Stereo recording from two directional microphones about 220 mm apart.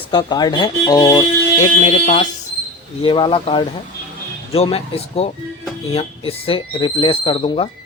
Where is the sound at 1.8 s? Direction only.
35° left (ahead or behind).